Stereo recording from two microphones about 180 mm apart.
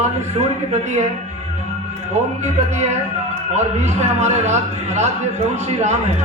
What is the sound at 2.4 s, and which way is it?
A man's voice, 40° right (ahead or behind).